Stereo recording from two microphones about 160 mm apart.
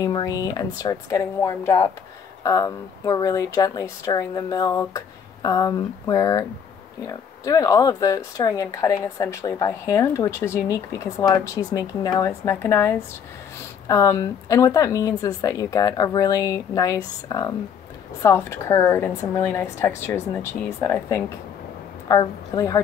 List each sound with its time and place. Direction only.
0.0 s a woman's voice: 25° left (ahead or behind)
22.0 s speech: 25° left (ahead or behind)